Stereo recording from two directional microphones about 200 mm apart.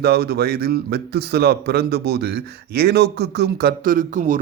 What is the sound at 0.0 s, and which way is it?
A man's voice, 50° right (ahead or behind).